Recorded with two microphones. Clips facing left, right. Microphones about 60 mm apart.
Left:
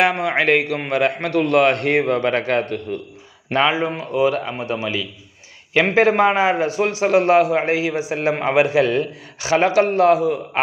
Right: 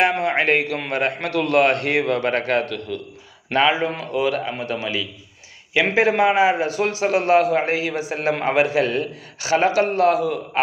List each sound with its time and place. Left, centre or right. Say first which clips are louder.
0.1 s a man's voice: left 1 dB; left